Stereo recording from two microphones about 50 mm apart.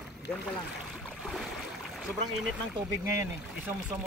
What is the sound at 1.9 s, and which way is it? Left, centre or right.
Speech, centre.